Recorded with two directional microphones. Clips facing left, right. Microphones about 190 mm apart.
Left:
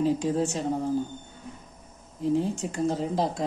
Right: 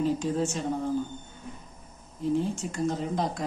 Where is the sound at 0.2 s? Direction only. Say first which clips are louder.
Left 2 dB; 35° left (ahead or behind).